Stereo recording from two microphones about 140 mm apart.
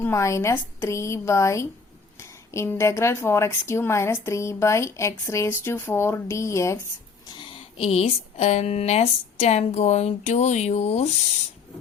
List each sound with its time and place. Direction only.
0.0 s speech: 20° left (ahead or behind)
7.3 s a sound: 35° left (ahead or behind)
7.9 s speech: 50° left (ahead or behind)